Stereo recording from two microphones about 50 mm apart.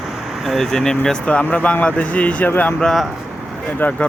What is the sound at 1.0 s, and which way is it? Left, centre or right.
A man's voice, left.